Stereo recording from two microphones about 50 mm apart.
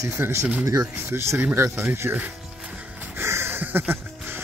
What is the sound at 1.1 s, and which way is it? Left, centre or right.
Speech, right.